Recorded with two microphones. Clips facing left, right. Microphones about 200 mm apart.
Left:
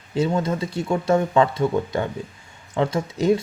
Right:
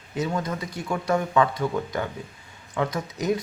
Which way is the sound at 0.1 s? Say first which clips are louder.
Left 5 dB; 25° left (ahead or behind).